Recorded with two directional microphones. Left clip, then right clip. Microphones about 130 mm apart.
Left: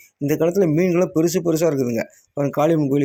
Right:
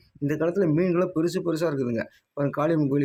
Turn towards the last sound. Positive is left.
turn(degrees=20)  # may be behind; listen again after turning